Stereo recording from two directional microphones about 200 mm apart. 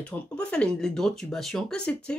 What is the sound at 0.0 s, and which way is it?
Speech, 5° left (ahead or behind).